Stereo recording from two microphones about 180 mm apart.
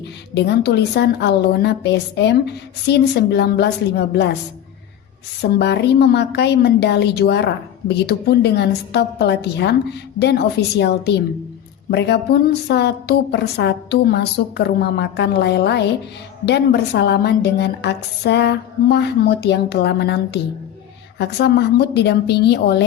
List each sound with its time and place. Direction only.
0.3 s a woman's voice: 70° left (ahead or behind)
5.4 s a woman's voice: 70° left (ahead or behind)